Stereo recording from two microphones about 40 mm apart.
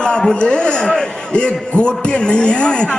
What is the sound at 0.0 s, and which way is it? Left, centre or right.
A man's voice, left.